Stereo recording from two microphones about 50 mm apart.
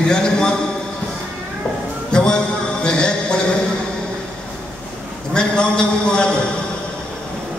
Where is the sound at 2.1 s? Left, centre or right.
Centre.